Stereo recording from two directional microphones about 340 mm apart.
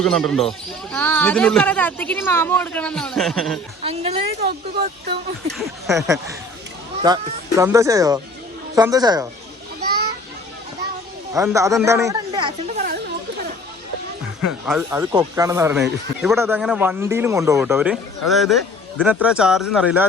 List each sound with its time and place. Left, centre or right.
0.0 s speech: centre
3.8 s a woman's voice: centre
5.5 s a woman's voice: centre
11.3 s speech: centre
14.7 s speech: centre